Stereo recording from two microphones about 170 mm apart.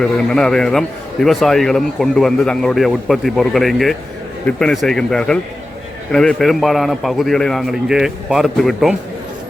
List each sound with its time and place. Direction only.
0.0 s a man's voice: 5° left (ahead or behind)